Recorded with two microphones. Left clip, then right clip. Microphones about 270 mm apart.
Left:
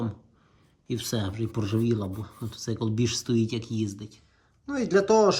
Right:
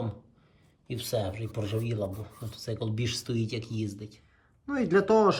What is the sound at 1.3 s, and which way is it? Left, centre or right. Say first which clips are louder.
Speech: left 3 dB; centre.